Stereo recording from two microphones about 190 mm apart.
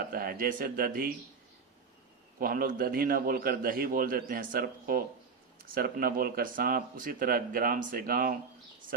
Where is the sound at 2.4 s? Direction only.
45° right (ahead or behind).